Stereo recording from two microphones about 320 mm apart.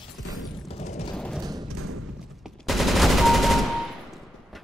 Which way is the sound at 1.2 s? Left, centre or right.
Centre.